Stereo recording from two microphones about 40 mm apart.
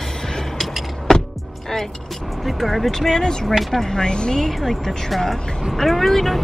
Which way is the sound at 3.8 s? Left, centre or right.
Centre.